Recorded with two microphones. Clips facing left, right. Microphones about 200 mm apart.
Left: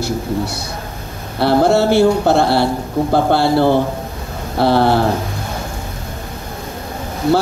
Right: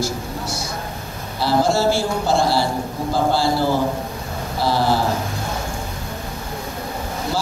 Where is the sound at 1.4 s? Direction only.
60° left (ahead or behind).